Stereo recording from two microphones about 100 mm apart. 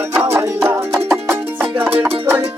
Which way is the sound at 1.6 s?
15° right (ahead or behind).